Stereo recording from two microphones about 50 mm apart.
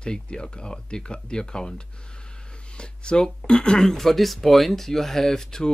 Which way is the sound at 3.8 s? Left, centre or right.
Centre.